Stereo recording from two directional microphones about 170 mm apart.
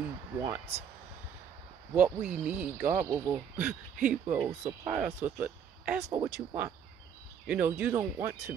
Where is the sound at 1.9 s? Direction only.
5° right (ahead or behind).